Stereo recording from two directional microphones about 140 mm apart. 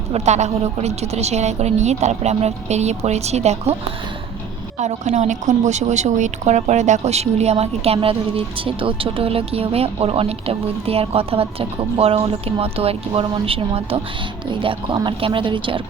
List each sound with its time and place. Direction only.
0.1 s a woman's voice: 55° right (ahead or behind)
4.8 s a woman's voice: 55° right (ahead or behind); by 15.8 s 35° right (ahead or behind)